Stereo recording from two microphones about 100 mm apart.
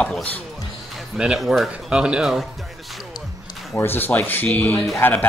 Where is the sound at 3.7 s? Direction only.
20° left (ahead or behind).